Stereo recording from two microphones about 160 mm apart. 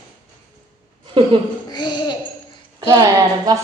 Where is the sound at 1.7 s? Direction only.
30° left (ahead or behind).